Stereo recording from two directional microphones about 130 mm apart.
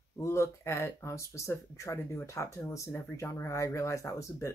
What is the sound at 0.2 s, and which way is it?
Speech, 20° left (ahead or behind).